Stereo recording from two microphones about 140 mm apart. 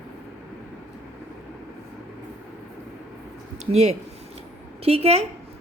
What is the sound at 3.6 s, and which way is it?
Speech, 50° right (ahead or behind).